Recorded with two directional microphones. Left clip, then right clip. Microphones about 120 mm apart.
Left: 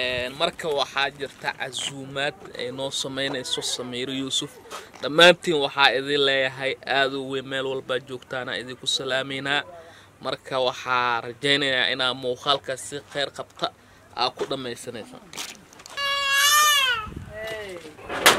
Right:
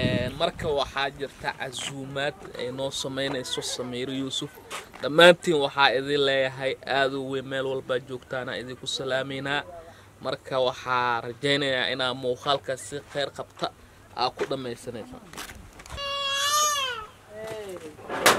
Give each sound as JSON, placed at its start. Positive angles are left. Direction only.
{"t": 0.0, "sound": "speech", "side_deg": 5}
{"t": 16.0, "sound": "baby cry", "side_deg": 40}
{"t": 18.0, "sound": "bird", "side_deg": 5}